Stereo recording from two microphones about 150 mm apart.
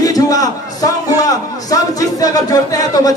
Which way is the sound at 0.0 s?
25° left (ahead or behind).